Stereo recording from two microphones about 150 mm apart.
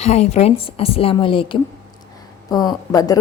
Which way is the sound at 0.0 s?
45° left (ahead or behind).